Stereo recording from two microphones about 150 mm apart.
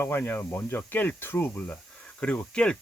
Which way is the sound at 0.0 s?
15° left (ahead or behind).